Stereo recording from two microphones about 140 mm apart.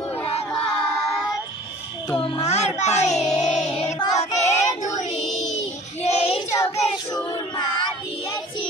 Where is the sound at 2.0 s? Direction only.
35° left (ahead or behind).